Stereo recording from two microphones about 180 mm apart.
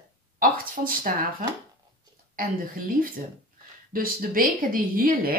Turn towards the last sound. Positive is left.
turn(degrees=-55)  # may be behind; listen again after turning